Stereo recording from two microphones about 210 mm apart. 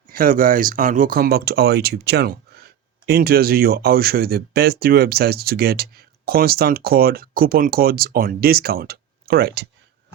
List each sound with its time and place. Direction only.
0.1 s speech: 40° right (ahead or behind)
2.5 s a sound: 50° right (ahead or behind)
3.1 s speech: 45° right (ahead or behind)